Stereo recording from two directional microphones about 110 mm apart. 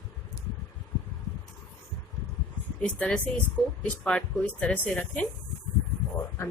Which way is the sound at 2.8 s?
10° left (ahead or behind).